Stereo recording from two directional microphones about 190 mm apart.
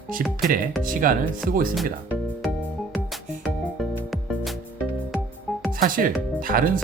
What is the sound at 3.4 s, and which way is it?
Music, centre (ahead or behind).